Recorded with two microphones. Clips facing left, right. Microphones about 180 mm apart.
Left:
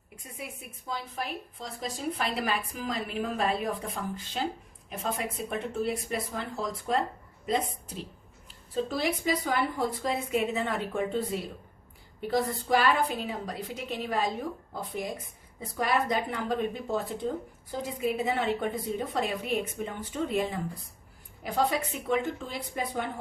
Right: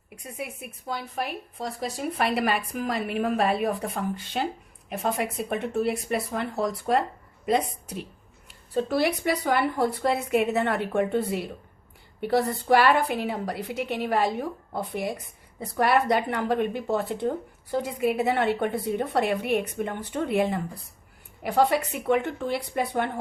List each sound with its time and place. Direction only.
0.3 s speech: 65° right (ahead or behind)